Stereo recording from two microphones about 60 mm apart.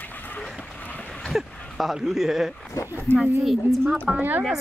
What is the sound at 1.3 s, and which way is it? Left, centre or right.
Speech, centre.